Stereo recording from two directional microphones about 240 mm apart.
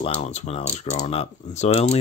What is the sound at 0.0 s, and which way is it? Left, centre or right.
Speech, left.